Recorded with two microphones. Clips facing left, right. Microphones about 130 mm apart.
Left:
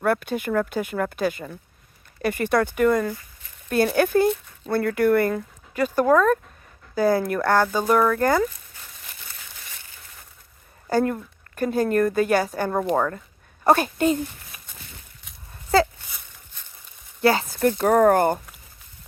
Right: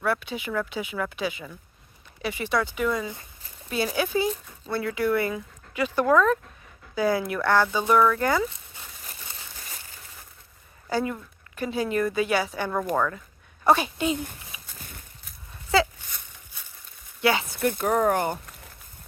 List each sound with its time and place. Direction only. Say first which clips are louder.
0.0 s a woman's voice: left 5 dB; 50° left (ahead or behind)
3.1 s speech: left 7 dB; 30° right (ahead or behind)
3.9 s a woman's voice: left 6 dB; 55° left (ahead or behind)
9.0 s crumpling: right 1 dB; 35° right (ahead or behind)
10.8 s a woman's voice: left 5 dB; 45° left (ahead or behind)
15.7 s speech: left 3 dB; 40° left (ahead or behind)
16.5 s a sound: right 1 dB; 10° right (ahead or behind)
17.2 s a woman's voice: left 4 dB; 40° left (ahead or behind)